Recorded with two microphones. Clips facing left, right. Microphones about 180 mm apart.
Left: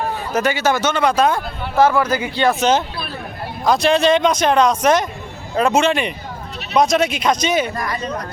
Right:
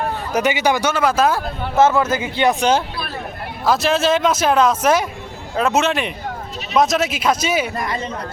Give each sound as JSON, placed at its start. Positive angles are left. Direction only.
{"t": 0.3, "sound": "speech", "side_deg": -15}
{"t": 1.7, "sound": "speech", "side_deg": -25}
{"t": 7.8, "sound": "speech", "side_deg": -25}